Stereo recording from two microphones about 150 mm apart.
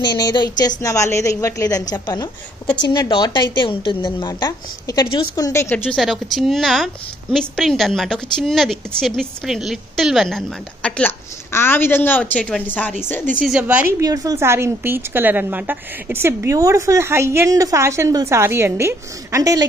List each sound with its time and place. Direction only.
0.0 s a woman's voice: 25° left (ahead or behind)
5.9 s a woman's voice: centre (ahead or behind)
13.4 s a woman's voice: 10° right (ahead or behind)
14.0 s a woman's voice: 25° right (ahead or behind)